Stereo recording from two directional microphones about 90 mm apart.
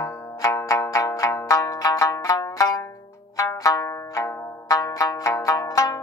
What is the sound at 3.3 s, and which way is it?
Zither, 40° left (ahead or behind).